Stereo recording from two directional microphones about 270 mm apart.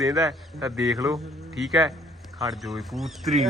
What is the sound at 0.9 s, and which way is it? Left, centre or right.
Speech, centre.